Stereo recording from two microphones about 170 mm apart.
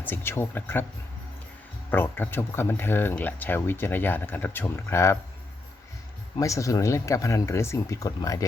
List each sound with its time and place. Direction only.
0.0 s speech: 15° left (ahead or behind)
1.9 s speech: 10° left (ahead or behind)
6.4 s speech: 20° left (ahead or behind)